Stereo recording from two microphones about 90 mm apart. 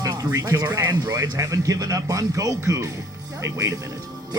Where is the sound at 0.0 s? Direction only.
50° right (ahead or behind).